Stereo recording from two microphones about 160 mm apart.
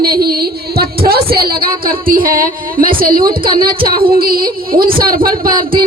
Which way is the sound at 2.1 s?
65° right (ahead or behind).